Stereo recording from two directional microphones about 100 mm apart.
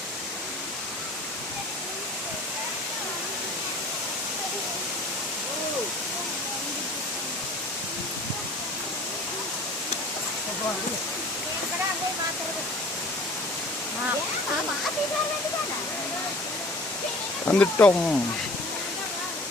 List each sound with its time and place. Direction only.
17.4 s speech: 20° left (ahead or behind)